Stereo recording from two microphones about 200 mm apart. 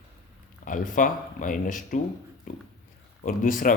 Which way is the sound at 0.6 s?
40° left (ahead or behind).